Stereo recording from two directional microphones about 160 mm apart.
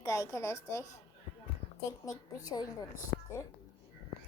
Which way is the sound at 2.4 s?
25° left (ahead or behind).